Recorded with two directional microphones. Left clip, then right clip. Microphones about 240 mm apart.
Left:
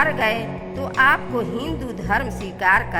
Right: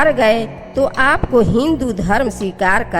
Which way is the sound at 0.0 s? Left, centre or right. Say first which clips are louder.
Right 7 dB; right.